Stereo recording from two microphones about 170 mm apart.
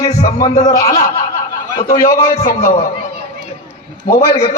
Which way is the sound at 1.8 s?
20° left (ahead or behind).